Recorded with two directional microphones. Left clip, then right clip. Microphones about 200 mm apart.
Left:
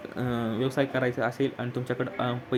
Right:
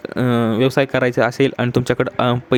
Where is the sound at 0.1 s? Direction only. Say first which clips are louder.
Right 13 dB; 40° right (ahead or behind).